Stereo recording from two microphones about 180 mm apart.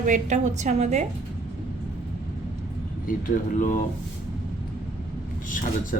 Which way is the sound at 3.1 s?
45° left (ahead or behind).